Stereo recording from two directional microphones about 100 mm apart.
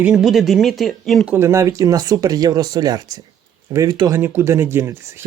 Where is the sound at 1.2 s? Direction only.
20° right (ahead or behind); by 4.1 s 45° right (ahead or behind).